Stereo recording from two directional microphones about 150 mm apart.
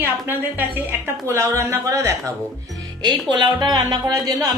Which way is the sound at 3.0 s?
30° right (ahead or behind).